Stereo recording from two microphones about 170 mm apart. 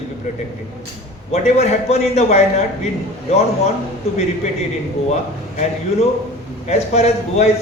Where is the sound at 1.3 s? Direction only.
40° left (ahead or behind).